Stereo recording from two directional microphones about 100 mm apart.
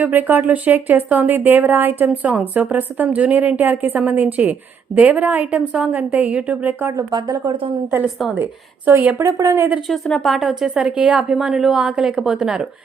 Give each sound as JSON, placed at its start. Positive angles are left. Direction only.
{"t": 0.0, "sound": "a woman's voice", "side_deg": -20}
{"t": 6.9, "sound": "speech", "side_deg": -40}
{"t": 8.9, "sound": "speech", "side_deg": -25}
{"t": 9.9, "sound": "a woman's voice", "side_deg": 5}